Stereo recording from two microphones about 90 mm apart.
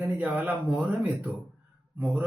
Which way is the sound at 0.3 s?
20° right (ahead or behind).